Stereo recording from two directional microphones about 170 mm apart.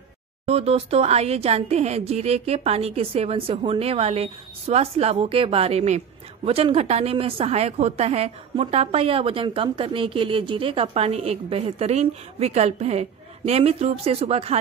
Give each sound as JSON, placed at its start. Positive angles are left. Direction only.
{"t": 0.5, "sound": "speech", "side_deg": -35}